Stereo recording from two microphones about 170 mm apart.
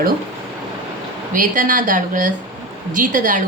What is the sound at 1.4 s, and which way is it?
A woman's voice, 50° right (ahead or behind).